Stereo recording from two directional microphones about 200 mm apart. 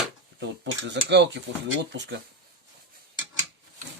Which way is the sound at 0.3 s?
60° right (ahead or behind).